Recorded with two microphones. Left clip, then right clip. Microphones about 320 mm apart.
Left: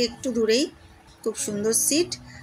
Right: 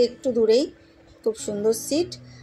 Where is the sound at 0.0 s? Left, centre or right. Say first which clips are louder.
Right 4 dB; left.